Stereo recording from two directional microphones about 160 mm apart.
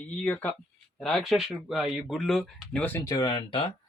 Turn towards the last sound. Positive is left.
turn(degrees=30)  # may be behind; listen again after turning